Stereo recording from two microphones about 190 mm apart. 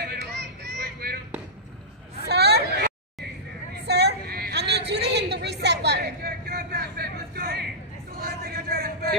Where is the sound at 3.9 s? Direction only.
60° right (ahead or behind).